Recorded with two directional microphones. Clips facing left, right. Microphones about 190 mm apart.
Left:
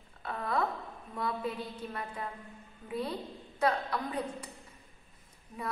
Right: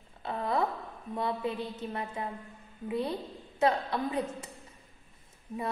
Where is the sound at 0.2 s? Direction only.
25° right (ahead or behind).